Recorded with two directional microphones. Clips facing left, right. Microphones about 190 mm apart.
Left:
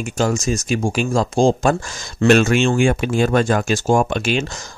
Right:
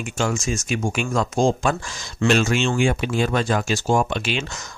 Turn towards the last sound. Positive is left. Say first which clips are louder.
# left 4 dB
turn(degrees=45)  # may be behind; listen again after turning